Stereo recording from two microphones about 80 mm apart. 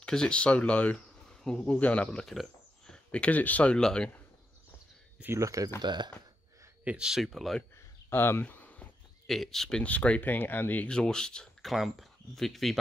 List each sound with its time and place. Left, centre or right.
0.0 s speech: centre
5.4 s speech: right
5.8 s speech: right
6.8 s speech: centre
8.1 s a sound: left
9.3 s speech: centre
9.8 s speech: centre
10.9 s speech: centre